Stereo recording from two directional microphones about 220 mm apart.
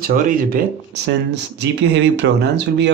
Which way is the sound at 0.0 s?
40° right (ahead or behind).